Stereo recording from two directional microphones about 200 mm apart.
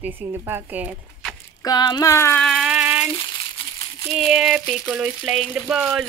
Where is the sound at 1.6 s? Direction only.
20° left (ahead or behind).